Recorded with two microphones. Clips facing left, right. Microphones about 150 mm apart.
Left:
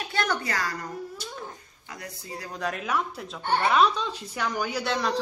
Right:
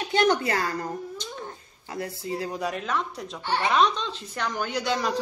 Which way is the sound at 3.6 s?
5° left (ahead or behind).